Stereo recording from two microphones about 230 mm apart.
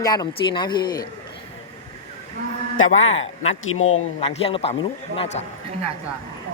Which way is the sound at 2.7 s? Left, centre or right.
Left.